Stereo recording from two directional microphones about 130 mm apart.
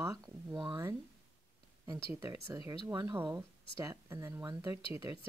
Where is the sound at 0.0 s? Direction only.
25° right (ahead or behind).